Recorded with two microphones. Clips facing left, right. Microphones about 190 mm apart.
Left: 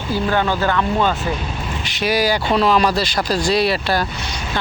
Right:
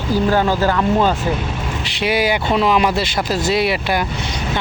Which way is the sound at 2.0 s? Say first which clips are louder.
Even; 25° right (ahead or behind).